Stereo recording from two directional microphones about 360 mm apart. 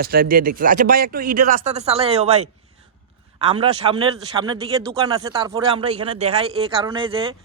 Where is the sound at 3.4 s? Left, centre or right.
Centre.